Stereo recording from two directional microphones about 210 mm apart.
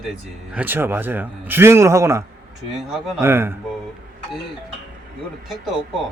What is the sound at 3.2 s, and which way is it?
Speech, 10° right (ahead or behind).